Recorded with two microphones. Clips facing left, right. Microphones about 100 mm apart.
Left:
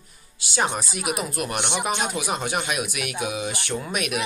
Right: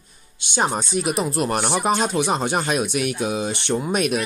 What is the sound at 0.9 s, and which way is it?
Speech, 30° right (ahead or behind).